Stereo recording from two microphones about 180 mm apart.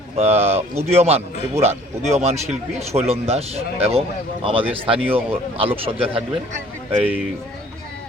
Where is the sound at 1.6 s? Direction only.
35° right (ahead or behind).